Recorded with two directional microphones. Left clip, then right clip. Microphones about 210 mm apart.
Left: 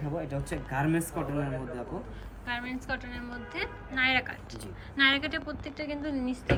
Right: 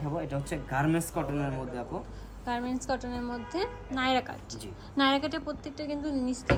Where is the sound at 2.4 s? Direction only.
20° right (ahead or behind).